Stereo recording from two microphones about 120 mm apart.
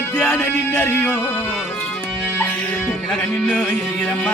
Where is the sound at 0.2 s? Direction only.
15° left (ahead or behind).